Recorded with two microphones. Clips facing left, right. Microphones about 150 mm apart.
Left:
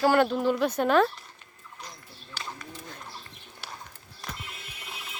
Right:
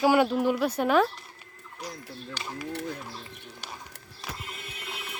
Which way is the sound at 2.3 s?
5° right (ahead or behind).